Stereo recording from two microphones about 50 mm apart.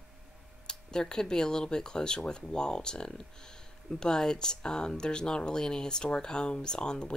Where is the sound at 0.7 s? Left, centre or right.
Centre.